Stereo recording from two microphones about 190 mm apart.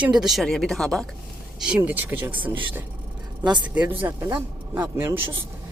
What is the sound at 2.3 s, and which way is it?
Speech, 25° right (ahead or behind).